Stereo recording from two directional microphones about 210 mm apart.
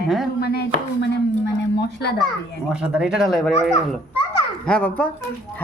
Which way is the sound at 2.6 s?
5° right (ahead or behind).